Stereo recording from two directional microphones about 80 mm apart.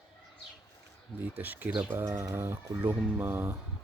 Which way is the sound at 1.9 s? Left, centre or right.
Right.